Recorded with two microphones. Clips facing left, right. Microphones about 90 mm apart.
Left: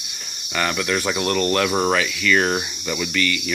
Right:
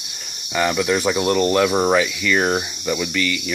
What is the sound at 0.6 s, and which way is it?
Speech, 15° right (ahead or behind).